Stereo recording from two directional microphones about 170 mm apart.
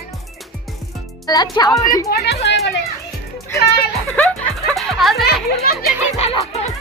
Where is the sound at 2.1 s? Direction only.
80° left.